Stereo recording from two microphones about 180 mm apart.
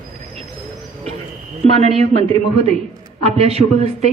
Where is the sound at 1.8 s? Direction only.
35° right (ahead or behind).